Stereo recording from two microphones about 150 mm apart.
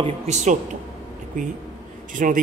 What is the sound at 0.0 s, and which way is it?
Speech, 50° right (ahead or behind).